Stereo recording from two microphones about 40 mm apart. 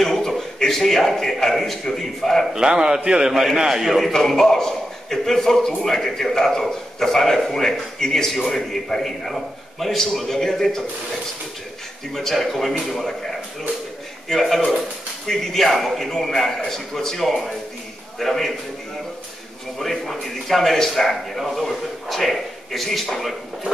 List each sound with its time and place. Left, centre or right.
0.0 s a sound: centre
0.6 s a man's voice: centre
2.5 s a man's voice: centre
4.0 s a man's voice: centre
12.1 s speech: centre
14.4 s a man's voice: centre
19.8 s speech: centre